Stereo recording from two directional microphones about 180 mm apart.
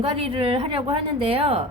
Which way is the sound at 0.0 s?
30° right (ahead or behind).